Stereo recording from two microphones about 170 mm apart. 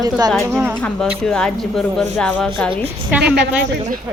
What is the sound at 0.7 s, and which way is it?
Speech, 5° left (ahead or behind).